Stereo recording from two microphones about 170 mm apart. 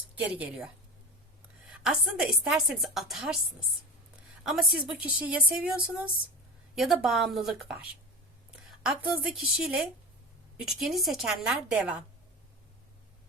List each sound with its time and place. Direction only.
0.2 s a woman's voice: 10° right (ahead or behind)
4.4 s a woman's voice: centre (ahead or behind)
8.8 s a woman's voice: 5° right (ahead or behind)